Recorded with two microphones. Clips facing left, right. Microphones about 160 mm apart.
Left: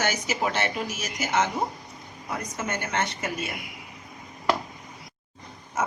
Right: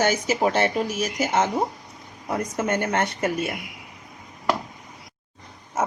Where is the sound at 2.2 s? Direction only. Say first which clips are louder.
Right 7 dB; 50° right (ahead or behind).